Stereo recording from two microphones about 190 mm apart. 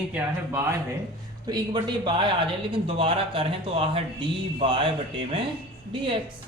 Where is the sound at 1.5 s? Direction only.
20° right (ahead or behind).